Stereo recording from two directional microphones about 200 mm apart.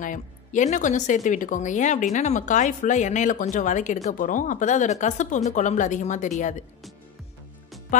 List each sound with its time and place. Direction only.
0.0 s speech: 40° left (ahead or behind)
7.9 s speech: 40° left (ahead or behind)